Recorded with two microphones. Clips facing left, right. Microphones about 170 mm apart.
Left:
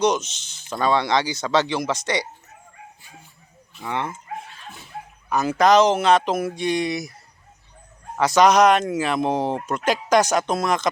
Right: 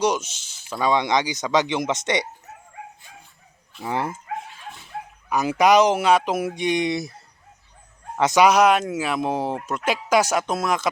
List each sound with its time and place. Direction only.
0.0 s speech: 10° right (ahead or behind)
3.8 s speech: 35° right (ahead or behind)
4.4 s dog: 15° right (ahead or behind)
5.3 s speech: 15° right (ahead or behind)
8.4 s speech: 5° right (ahead or behind)